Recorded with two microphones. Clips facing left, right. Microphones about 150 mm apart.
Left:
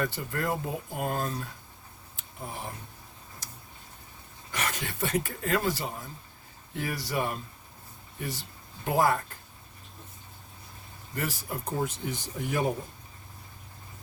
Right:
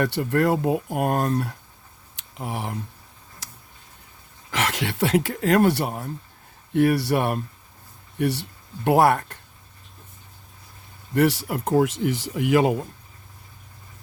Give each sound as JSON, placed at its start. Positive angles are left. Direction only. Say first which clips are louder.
{"t": 0.0, "sound": "speech", "louder": "right 10 dB", "side_deg": -70}
{"t": 2.1, "sound": "a sound", "louder": "right 8 dB", "side_deg": -85}
{"t": 4.5, "sound": "speech", "louder": "right 8 dB", "side_deg": -90}
{"t": 11.1, "sound": "speech", "louder": "right 13 dB", "side_deg": -75}